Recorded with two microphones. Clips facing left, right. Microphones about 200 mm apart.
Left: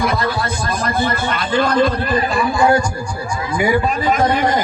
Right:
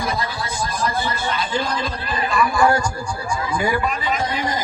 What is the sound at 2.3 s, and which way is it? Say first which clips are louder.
Speech: left 1 dB; 25° left (ahead or behind).